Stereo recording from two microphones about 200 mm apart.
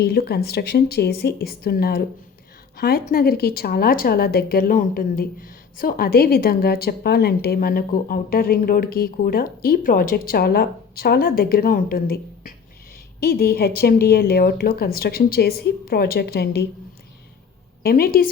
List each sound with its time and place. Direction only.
0.0 s speech: 55° left (ahead or behind)
17.8 s speech: 50° left (ahead or behind)